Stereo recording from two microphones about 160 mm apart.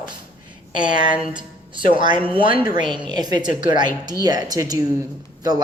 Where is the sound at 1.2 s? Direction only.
30° right (ahead or behind).